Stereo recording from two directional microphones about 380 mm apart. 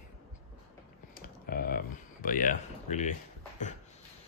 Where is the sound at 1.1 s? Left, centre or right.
Left.